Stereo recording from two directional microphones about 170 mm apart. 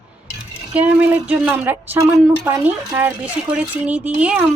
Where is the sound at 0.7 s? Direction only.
10° right (ahead or behind).